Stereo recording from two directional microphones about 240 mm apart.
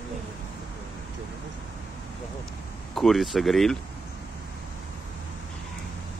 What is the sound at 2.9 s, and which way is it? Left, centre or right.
Speech, centre.